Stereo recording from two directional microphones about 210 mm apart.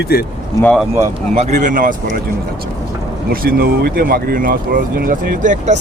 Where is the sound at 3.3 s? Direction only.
45° right (ahead or behind).